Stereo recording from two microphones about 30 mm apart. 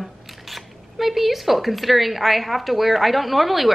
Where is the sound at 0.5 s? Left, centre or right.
Centre.